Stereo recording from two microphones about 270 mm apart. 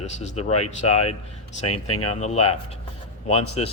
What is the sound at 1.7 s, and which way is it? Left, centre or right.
Speech, left.